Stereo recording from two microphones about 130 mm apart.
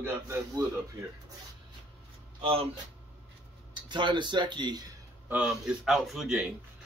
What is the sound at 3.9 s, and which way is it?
Speech, 35° right (ahead or behind).